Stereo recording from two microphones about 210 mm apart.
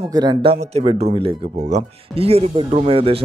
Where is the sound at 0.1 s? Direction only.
20° right (ahead or behind).